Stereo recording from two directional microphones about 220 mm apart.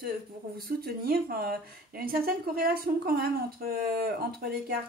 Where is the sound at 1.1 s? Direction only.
40° right (ahead or behind).